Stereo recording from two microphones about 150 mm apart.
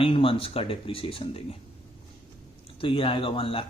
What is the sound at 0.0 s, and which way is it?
Speech, 35° left (ahead or behind).